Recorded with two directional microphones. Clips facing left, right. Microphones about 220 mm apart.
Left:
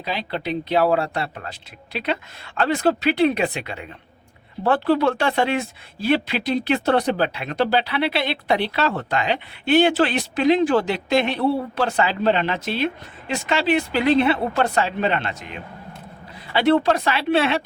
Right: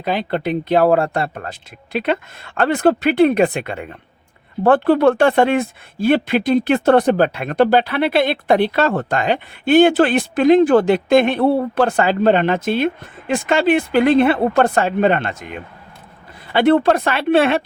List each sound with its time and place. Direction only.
0.0 s speech: 50° right (ahead or behind)